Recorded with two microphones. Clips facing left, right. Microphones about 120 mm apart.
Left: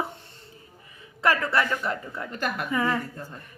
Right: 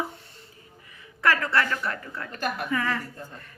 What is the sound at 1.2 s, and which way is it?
Female singing, 20° left (ahead or behind).